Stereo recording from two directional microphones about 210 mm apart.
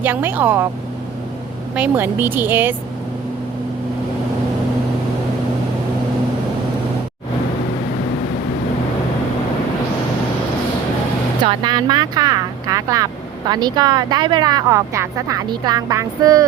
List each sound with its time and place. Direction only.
0.0 s speech: 10° right (ahead or behind)
1.7 s speech: 10° right (ahead or behind)
11.4 s speech: 20° right (ahead or behind)